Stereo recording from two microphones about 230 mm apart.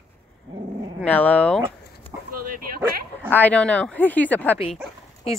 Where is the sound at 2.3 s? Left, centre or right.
Right.